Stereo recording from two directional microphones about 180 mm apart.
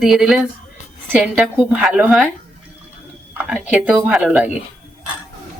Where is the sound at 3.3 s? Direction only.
5° right (ahead or behind).